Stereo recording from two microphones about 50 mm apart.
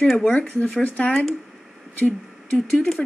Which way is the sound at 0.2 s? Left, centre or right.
Left.